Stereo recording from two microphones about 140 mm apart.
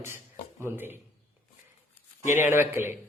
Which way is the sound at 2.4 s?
15° right (ahead or behind).